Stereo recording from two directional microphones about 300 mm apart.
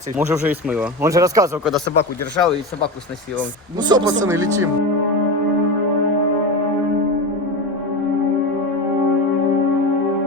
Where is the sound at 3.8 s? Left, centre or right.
Centre.